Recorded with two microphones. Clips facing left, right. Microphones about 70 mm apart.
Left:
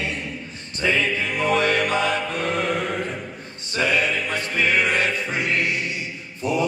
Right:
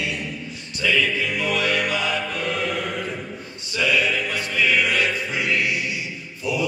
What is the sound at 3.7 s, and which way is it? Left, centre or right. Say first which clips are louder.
Music: even; left.